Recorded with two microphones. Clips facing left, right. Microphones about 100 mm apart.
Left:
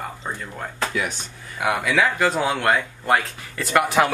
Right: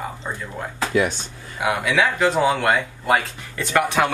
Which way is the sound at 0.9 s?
35° right (ahead or behind).